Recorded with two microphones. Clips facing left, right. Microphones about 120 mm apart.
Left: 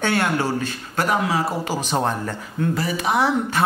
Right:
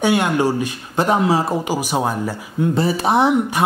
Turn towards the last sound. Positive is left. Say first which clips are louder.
# right 2 dB
turn(degrees=-15)  # may be behind; listen again after turning